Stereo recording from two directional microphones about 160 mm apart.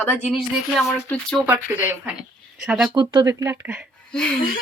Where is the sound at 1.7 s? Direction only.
10° right (ahead or behind).